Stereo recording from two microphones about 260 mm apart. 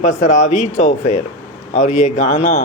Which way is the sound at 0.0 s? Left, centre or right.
Left.